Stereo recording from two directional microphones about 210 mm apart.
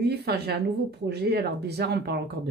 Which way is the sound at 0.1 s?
50° right (ahead or behind).